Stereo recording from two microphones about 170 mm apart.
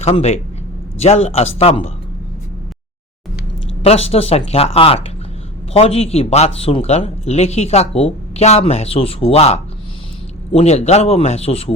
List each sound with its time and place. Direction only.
0.0 s speech: 40° left (ahead or behind)
3.8 s speech: 35° left (ahead or behind)